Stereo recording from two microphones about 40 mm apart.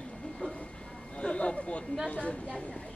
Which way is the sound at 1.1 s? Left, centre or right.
Left.